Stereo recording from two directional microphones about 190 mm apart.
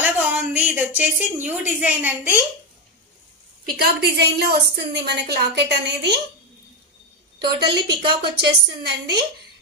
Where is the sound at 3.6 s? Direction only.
55° right (ahead or behind).